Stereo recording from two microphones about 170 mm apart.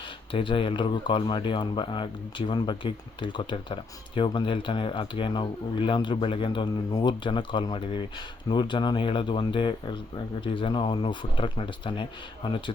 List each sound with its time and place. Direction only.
0.3 s speech: 30° left (ahead or behind)